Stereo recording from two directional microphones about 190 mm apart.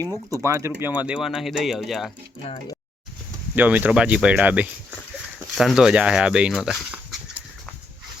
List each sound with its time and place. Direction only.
0.3 s speech: 15° right (ahead or behind); by 2.1 s centre (ahead or behind)
3.5 s speech: 10° right (ahead or behind)